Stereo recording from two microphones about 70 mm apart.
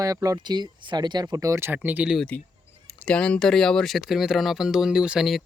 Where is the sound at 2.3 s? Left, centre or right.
Left; by 5.3 s centre.